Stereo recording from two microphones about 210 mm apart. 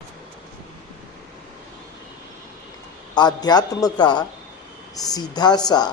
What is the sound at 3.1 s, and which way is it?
A woman's voice, 20° left (ahead or behind).